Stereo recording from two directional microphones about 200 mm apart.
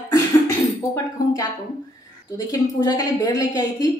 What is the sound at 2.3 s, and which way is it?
A woman's voice, 15° left (ahead or behind).